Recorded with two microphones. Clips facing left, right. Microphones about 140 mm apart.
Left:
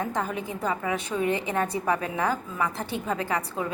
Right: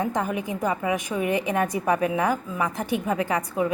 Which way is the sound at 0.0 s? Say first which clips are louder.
Right 3 dB; 15° right (ahead or behind).